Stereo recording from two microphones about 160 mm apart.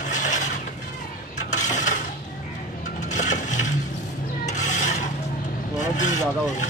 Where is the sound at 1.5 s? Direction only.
50° left (ahead or behind).